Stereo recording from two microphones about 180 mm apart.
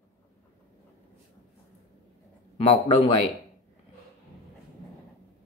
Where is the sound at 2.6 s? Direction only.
30° left (ahead or behind).